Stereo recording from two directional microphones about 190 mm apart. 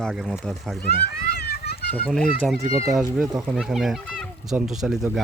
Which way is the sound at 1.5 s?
55° left (ahead or behind).